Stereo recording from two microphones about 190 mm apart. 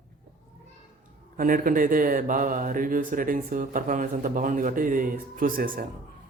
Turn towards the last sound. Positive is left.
turn(degrees=-50)  # may be behind; listen again after turning